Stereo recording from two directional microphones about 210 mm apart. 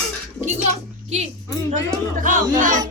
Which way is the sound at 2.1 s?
40° right (ahead or behind).